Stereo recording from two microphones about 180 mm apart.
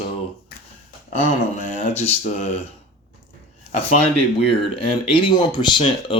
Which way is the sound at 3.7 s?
35° left (ahead or behind).